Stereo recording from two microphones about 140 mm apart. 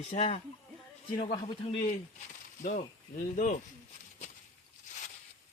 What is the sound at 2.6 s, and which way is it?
Speech, 65° left (ahead or behind).